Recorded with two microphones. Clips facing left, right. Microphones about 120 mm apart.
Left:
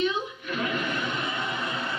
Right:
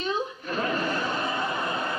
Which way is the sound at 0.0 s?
40° right (ahead or behind).